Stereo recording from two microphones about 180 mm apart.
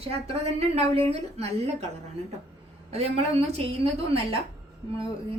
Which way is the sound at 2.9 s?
35° right (ahead or behind).